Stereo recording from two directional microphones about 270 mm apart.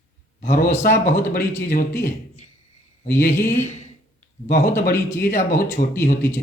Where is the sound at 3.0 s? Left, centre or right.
Centre.